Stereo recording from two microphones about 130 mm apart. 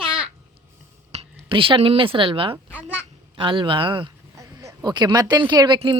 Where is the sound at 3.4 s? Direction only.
40° right (ahead or behind).